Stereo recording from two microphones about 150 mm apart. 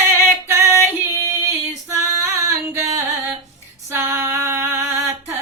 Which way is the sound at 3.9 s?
15° right (ahead or behind).